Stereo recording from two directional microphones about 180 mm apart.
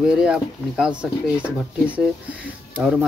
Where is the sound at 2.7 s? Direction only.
5° right (ahead or behind).